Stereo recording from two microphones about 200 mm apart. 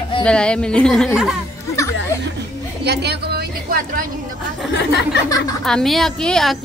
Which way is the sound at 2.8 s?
55° right (ahead or behind).